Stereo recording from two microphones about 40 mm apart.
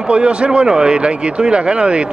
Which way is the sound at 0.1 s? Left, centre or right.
Right.